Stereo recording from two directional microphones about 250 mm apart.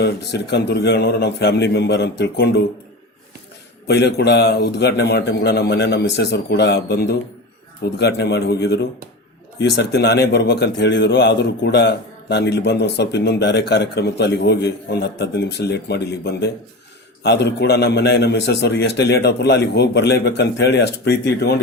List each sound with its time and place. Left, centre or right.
0.0 s a man's voice: left
3.8 s a man's voice: left